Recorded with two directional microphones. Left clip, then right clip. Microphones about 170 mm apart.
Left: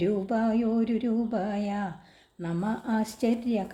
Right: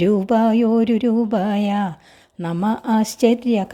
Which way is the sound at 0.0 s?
55° right (ahead or behind).